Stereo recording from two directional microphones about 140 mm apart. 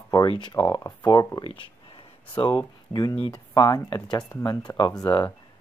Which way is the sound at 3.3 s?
30° left (ahead or behind).